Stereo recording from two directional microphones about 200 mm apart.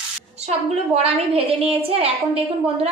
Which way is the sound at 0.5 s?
30° right (ahead or behind).